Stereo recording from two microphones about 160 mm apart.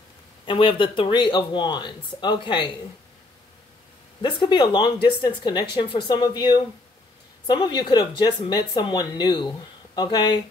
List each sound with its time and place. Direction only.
0.5 s speech: 30° left (ahead or behind)
4.2 s speech: 30° left (ahead or behind)